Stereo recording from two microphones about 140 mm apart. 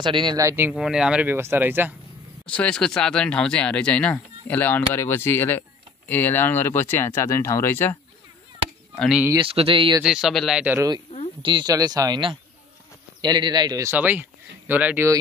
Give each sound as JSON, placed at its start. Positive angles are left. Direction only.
{"t": 0.0, "sound": "speech", "side_deg": -35}
{"t": 0.4, "sound": "speech", "side_deg": -20}
{"t": 0.7, "sound": "speech", "side_deg": -5}
{"t": 2.4, "sound": "speech", "side_deg": 10}
{"t": 9.4, "sound": "speech", "side_deg": -40}
{"t": 10.0, "sound": "speech", "side_deg": -5}
{"t": 10.6, "sound": "speech", "side_deg": -10}
{"t": 11.4, "sound": "speech", "side_deg": -30}
{"t": 13.9, "sound": "speech", "side_deg": -10}